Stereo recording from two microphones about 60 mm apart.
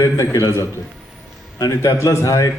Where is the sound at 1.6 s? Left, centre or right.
Left.